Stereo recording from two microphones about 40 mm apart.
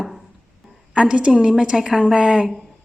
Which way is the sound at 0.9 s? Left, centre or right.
Right.